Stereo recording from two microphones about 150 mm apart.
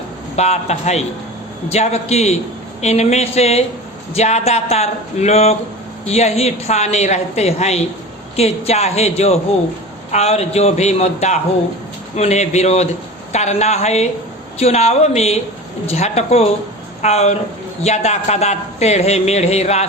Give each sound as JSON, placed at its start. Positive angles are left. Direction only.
{"t": 0.3, "sound": "speech", "side_deg": 45}